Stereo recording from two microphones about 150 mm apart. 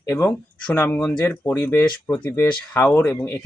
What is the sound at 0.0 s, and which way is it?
Speech, 20° left (ahead or behind).